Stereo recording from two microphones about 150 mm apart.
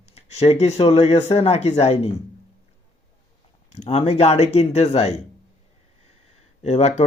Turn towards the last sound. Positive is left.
turn(degrees=45)  # may be behind; listen again after turning